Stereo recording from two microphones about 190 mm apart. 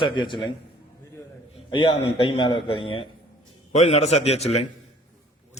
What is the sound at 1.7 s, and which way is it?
A man's voice, 25° left (ahead or behind).